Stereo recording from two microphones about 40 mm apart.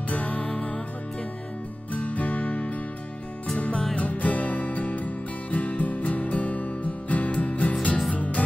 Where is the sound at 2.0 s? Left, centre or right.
Left.